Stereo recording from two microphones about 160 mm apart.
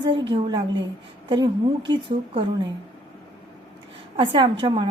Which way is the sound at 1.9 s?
30° right (ahead or behind).